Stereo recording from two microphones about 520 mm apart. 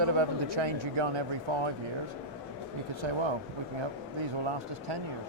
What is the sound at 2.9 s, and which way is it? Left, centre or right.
Speech, right.